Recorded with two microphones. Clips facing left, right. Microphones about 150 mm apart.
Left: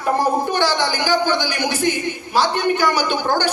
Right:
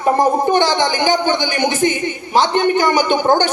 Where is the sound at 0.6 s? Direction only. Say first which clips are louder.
Right 4 dB; 20° right (ahead or behind).